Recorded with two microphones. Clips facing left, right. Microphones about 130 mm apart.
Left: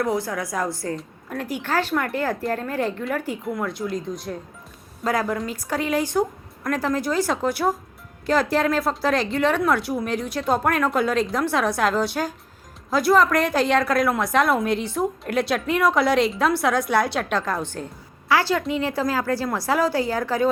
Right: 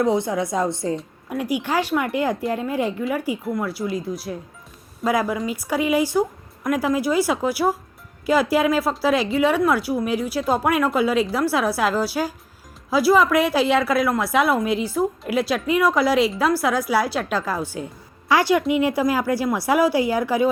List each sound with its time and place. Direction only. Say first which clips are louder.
0.0 s a woman's voice: right 4 dB; 20° right (ahead or behind)
0.9 s a woman's voice: right 3 dB; 10° right (ahead or behind)